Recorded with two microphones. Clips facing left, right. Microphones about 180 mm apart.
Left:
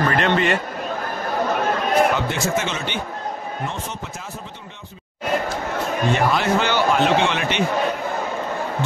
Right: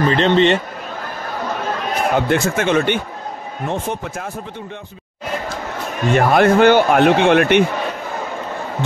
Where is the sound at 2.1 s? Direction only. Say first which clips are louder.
Right 5 dB; 55° right (ahead or behind).